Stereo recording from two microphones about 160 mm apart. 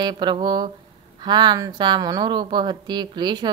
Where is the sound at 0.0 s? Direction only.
30° right (ahead or behind).